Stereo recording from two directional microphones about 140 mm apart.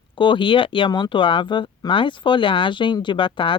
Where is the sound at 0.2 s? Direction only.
35° left (ahead or behind).